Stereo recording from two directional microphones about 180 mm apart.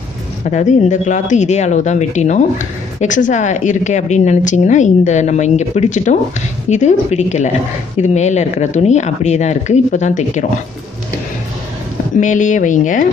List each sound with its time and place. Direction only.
0.5 s a woman's voice: 40° left (ahead or behind)
12.2 s speech: 45° left (ahead or behind)